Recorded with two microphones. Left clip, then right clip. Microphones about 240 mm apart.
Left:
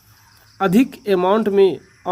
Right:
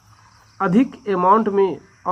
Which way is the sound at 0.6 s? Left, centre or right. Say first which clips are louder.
Left 2 dB; left.